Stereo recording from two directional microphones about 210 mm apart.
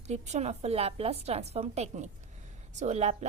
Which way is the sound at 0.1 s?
35° right (ahead or behind).